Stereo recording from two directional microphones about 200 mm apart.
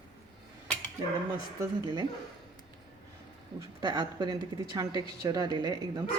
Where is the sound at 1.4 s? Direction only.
20° right (ahead or behind).